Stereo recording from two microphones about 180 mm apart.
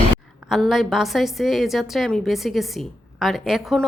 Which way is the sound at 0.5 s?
Centre (ahead or behind).